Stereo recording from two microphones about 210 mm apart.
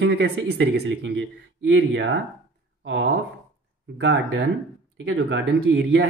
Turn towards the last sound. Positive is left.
turn(degrees=-60)  # may be behind; listen again after turning